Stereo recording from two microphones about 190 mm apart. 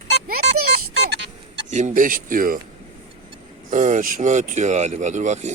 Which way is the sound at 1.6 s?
40° right (ahead or behind).